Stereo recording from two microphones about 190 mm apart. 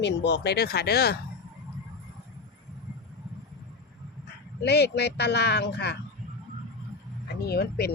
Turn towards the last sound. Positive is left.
turn(degrees=55)  # may be behind; listen again after turning